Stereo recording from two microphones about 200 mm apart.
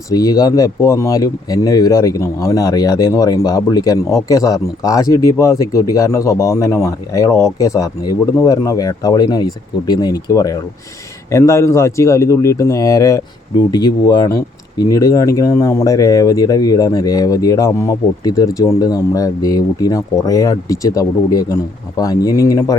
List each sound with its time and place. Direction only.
0.1 s speech: 20° left (ahead or behind)